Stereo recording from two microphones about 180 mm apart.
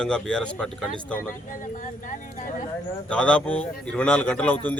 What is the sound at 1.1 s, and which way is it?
Speech, 45° left (ahead or behind).